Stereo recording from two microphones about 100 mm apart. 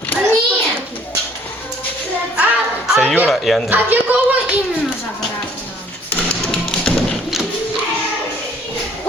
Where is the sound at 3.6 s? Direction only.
20° right (ahead or behind).